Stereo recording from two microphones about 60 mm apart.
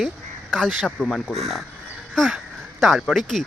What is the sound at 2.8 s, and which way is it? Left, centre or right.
Speech, centre.